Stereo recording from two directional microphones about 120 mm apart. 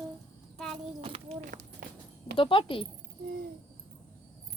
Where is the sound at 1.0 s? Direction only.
50° right (ahead or behind).